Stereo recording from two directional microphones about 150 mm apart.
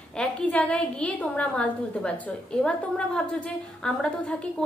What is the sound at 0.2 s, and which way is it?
A woman's voice, 5° left (ahead or behind).